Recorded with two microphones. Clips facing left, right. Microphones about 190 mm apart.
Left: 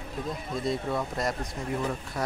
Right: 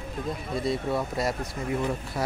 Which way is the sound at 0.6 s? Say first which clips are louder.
Right 2 dB; 5° right (ahead or behind).